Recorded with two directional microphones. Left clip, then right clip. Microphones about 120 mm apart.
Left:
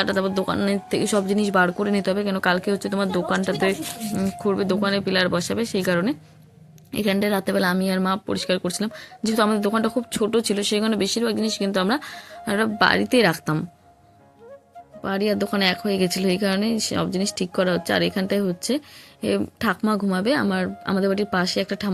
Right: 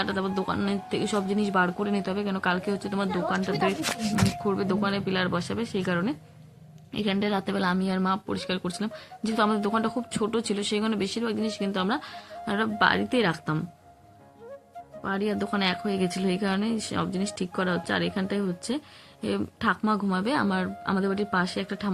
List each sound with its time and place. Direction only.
0.0 s speech: 55° left (ahead or behind)
4.4 s speech: 45° left (ahead or behind)
15.0 s a woman's voice: 45° left (ahead or behind)